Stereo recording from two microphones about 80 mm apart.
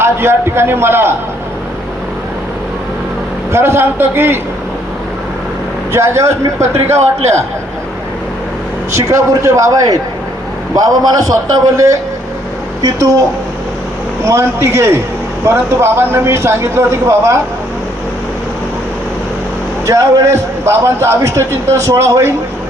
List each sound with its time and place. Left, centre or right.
0.0 s a man's voice: right
3.5 s a man's voice: right
5.9 s a man's voice: right
9.0 s a man's voice: right
14.3 s a man's voice: right
19.9 s a man's voice: right